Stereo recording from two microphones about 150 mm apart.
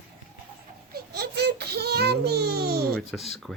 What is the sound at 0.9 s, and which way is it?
Speech, 90° right.